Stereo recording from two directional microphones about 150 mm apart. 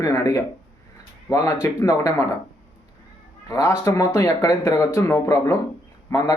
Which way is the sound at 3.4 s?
20° left (ahead or behind).